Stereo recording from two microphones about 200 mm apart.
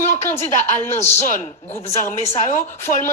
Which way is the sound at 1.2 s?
35° left (ahead or behind).